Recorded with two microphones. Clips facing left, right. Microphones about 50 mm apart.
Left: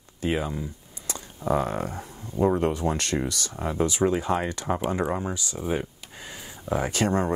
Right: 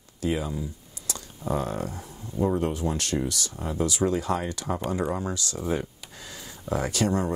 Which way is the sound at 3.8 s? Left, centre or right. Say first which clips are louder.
Left 1 dB; left.